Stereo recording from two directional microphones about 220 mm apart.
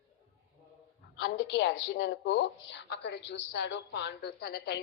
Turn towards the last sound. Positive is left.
turn(degrees=45)  # may be behind; listen again after turning